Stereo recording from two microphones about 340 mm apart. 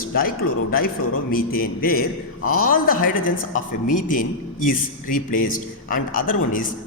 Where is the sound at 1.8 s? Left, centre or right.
Left.